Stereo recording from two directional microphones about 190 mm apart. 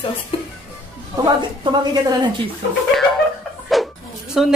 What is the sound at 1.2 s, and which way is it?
A woman's voice, 25° right (ahead or behind).